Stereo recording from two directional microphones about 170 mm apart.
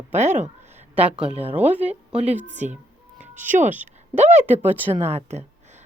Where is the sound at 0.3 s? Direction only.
45° right (ahead or behind).